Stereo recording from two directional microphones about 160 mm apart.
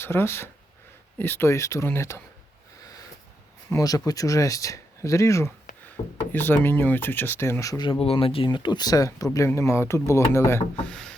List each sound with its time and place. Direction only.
0.0 s speech: 15° left (ahead or behind)
3.7 s speech: 20° left (ahead or behind)
6.0 s speech: 35° left (ahead or behind)
6.3 s speech: 10° left (ahead or behind)